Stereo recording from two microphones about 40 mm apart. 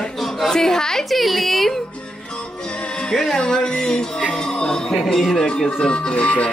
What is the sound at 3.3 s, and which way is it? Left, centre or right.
Speech, centre.